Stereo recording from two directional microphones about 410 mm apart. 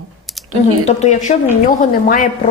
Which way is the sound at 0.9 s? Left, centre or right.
Centre.